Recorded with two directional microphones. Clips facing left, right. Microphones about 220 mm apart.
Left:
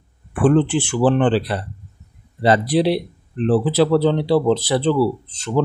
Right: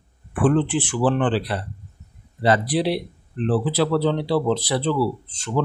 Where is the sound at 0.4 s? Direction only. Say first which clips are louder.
Left 4 dB; 25° left (ahead or behind).